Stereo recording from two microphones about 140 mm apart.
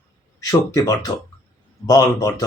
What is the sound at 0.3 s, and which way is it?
Speech, 25° left (ahead or behind).